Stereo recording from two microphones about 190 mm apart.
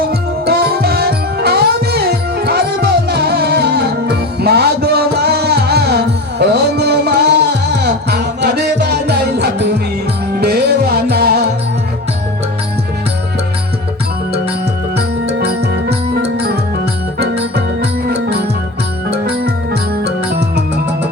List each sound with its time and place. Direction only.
0.1 s music: 55° right (ahead or behind)
14.9 s music: 60° right (ahead or behind)
18.1 s music: 60° right (ahead or behind)
20.0 s music: 60° right (ahead or behind)